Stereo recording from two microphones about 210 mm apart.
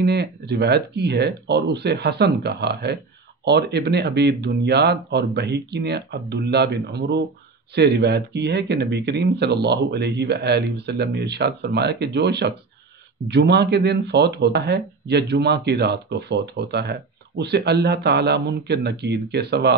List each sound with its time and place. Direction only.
0.0 s speech: 50° right (ahead or behind)